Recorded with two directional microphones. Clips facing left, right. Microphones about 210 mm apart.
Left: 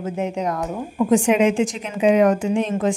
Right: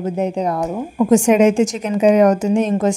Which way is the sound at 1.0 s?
45° right (ahead or behind).